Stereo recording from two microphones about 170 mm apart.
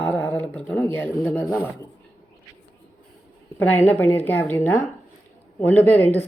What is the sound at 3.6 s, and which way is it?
Speech, 10° left (ahead or behind).